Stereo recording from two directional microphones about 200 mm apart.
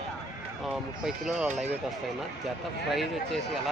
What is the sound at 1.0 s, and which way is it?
Speech, centre (ahead or behind).